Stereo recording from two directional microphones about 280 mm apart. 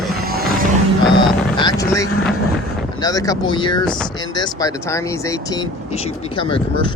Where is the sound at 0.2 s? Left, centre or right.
Right.